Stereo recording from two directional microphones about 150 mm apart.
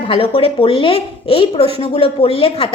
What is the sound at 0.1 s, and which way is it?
A woman's voice, 40° left (ahead or behind).